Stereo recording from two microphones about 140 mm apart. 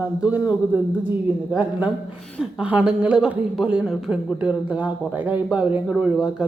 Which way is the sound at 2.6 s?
10° right (ahead or behind).